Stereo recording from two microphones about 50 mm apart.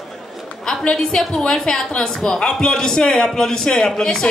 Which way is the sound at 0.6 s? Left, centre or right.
Centre.